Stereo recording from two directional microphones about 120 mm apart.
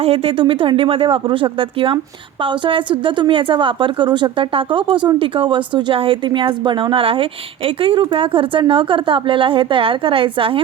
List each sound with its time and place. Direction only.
0.0 s a woman's voice: 55° right (ahead or behind)